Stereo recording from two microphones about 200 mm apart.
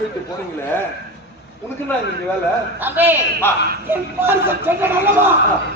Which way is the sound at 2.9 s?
10° right (ahead or behind).